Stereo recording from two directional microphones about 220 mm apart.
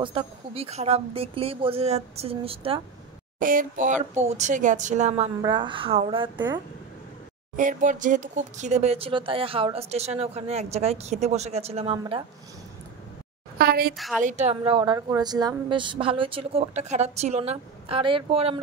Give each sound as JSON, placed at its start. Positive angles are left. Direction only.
{"t": 0.0, "sound": "speech", "side_deg": -25}
{"t": 3.3, "sound": "speech", "side_deg": -40}
{"t": 7.5, "sound": "speech", "side_deg": -35}
{"t": 13.6, "sound": "a woman's voice", "side_deg": -45}
{"t": 13.9, "sound": "a woman's voice", "side_deg": 0}
{"t": 14.2, "sound": "speech", "side_deg": -30}